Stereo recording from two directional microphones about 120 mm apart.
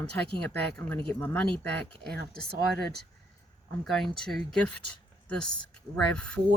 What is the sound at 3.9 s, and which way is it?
Speech, 5° left (ahead or behind).